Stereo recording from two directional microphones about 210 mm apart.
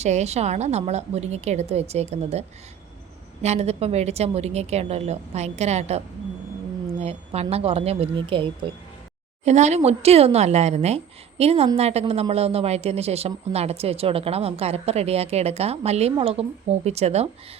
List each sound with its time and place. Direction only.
0.0 s a woman's voice: 30° right (ahead or behind)
3.4 s a woman's voice: 30° right (ahead or behind)
7.0 s a woman's voice: 30° right (ahead or behind)